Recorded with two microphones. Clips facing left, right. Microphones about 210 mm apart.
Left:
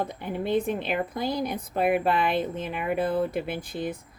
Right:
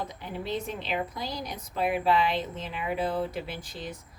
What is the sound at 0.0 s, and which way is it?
A woman's voice, 55° left (ahead or behind).